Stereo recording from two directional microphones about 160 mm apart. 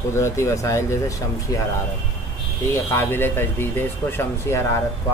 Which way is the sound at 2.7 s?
15° left (ahead or behind).